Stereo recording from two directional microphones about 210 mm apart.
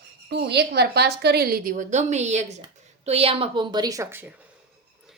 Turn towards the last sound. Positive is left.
turn(degrees=-15)  # may be behind; listen again after turning